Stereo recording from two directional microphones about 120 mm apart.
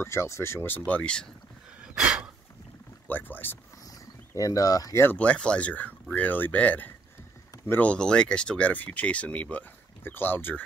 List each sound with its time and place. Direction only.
0.0 s speech: 25° left (ahead or behind); by 1.3 s 10° left (ahead or behind)
2.0 s a sound: 5° right (ahead or behind)
3.1 s speech: 15° left (ahead or behind)
4.4 s speech: 30° left (ahead or behind)
5.0 s speech: 10° left (ahead or behind)